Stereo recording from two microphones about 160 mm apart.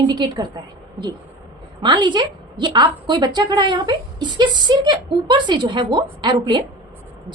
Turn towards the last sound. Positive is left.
turn(degrees=-30)  # may be behind; listen again after turning